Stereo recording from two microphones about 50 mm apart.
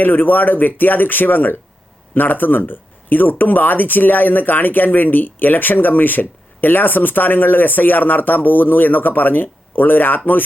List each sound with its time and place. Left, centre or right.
0.0 s speech: left